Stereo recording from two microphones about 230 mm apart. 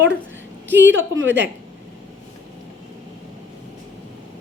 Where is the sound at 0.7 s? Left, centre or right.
Right.